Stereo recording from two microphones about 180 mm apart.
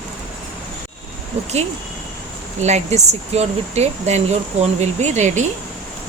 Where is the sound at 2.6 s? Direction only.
40° right (ahead or behind).